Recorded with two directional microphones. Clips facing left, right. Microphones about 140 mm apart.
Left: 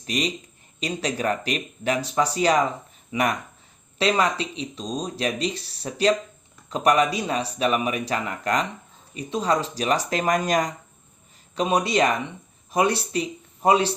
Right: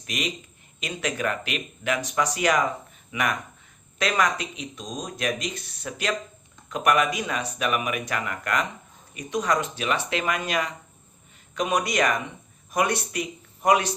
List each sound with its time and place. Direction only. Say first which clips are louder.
0.0 s speech: left 4 dB; 35° left (ahead or behind)
11.5 s speech: left 3 dB; 30° left (ahead or behind)